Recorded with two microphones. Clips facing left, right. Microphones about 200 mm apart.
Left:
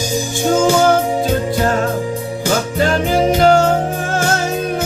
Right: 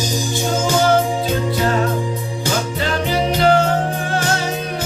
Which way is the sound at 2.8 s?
45° left (ahead or behind).